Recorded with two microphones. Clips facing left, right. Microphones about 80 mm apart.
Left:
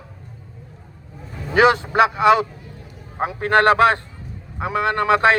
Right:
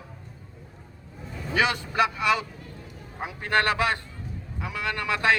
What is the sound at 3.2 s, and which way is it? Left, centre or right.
Speech, left.